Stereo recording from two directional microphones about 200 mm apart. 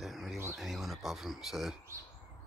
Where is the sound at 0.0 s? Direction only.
Centre (ahead or behind).